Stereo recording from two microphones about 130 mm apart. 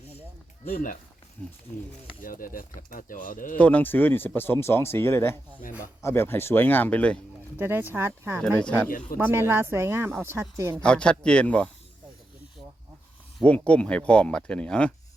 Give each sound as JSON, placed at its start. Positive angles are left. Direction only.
{"t": 0.6, "sound": "speech", "side_deg": 90}
{"t": 1.4, "sound": "speech", "side_deg": 10}
{"t": 2.2, "sound": "speech", "side_deg": 90}
{"t": 3.6, "sound": "speech", "side_deg": 10}
{"t": 7.6, "sound": "speech", "side_deg": -15}
{"t": 8.5, "sound": "speech", "side_deg": 10}
{"t": 8.9, "sound": "speech", "side_deg": 90}
{"t": 9.1, "sound": "speech", "side_deg": -20}
{"t": 10.8, "sound": "speech", "side_deg": 5}
{"t": 13.4, "sound": "speech", "side_deg": 10}